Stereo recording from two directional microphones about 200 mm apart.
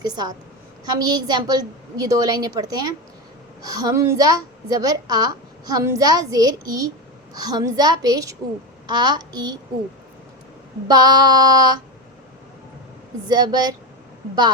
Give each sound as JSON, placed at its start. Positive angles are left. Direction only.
{"t": 0.0, "sound": "a woman's voice", "side_deg": -20}
{"t": 10.8, "sound": "a woman's voice", "side_deg": -20}
{"t": 13.2, "sound": "a woman's voice", "side_deg": -20}